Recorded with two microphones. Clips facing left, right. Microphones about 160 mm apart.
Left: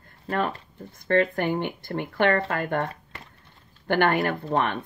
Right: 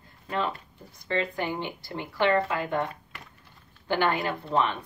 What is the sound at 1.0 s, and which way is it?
Speech, 55° left (ahead or behind).